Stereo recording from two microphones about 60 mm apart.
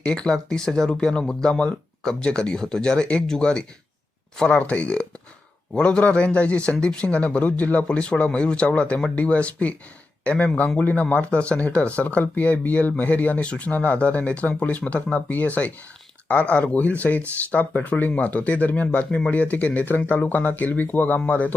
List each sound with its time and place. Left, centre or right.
0.1 s speech: centre